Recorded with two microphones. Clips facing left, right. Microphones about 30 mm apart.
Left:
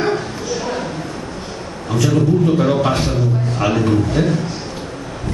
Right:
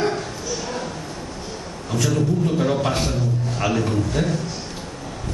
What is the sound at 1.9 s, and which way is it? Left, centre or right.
A man's voice, centre.